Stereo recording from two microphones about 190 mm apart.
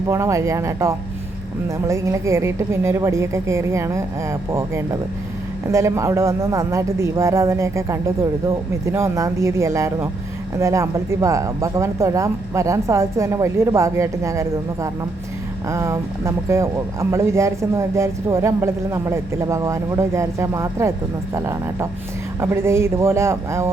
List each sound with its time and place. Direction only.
0.1 s speech: 15° right (ahead or behind)